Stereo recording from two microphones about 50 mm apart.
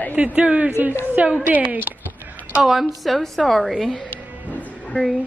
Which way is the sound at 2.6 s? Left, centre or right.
Centre.